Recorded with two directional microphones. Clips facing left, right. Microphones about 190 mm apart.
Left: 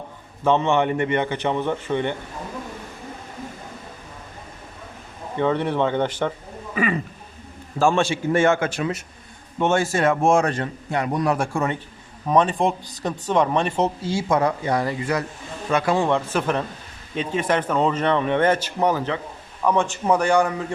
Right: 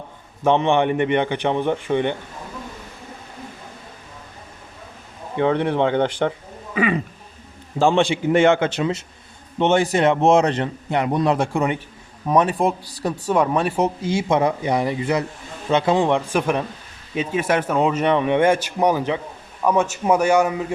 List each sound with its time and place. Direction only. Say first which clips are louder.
0.4 s speech: right 2 dB; 15° right (ahead or behind)
5.4 s a man's voice: right 2 dB; 15° right (ahead or behind)